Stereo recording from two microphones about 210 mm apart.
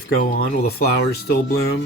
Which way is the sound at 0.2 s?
45° left (ahead or behind).